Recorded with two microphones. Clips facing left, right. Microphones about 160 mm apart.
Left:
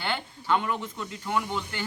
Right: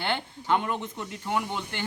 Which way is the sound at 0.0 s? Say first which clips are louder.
Right 2 dB; 20° right (ahead or behind).